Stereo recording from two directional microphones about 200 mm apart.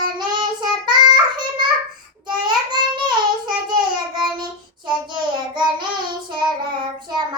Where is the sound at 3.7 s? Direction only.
20° right (ahead or behind).